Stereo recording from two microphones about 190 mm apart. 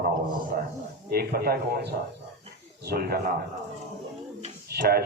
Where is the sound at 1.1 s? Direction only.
55° right (ahead or behind).